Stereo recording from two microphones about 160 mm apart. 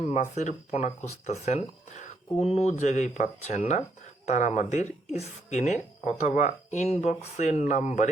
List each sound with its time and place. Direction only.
0.0 s speech: 45° left (ahead or behind)